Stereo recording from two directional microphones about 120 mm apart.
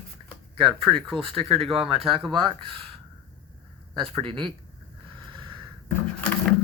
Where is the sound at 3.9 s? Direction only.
40° right (ahead or behind).